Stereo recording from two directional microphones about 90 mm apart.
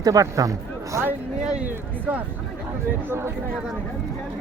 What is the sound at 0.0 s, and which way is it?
Speech, 40° right (ahead or behind).